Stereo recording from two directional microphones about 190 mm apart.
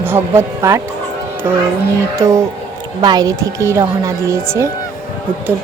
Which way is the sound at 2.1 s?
15° right (ahead or behind).